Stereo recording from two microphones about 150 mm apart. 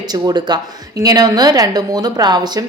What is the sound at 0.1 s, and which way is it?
Speech, 30° right (ahead or behind).